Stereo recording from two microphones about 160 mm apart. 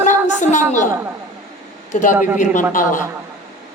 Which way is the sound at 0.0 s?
50° left (ahead or behind).